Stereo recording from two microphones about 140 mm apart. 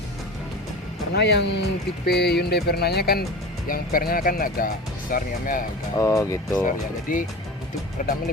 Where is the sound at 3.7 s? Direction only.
90° left.